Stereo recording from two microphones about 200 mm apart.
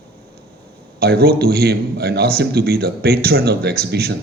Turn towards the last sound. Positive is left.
turn(degrees=-50)  # may be behind; listen again after turning